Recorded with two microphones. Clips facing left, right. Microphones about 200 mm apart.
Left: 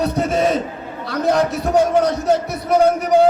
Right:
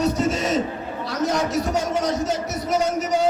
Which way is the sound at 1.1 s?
60° left (ahead or behind).